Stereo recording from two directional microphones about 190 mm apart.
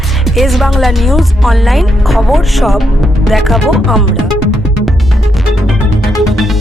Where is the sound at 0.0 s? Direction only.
Centre (ahead or behind).